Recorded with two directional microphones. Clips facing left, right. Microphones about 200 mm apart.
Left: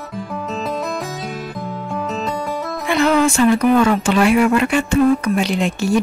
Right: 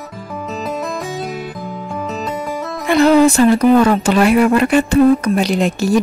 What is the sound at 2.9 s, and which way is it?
Speech, 35° right (ahead or behind).